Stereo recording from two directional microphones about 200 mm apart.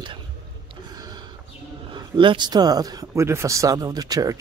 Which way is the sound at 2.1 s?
25° right (ahead or behind).